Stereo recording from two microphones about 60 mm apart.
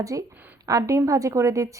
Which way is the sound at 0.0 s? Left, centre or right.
Right.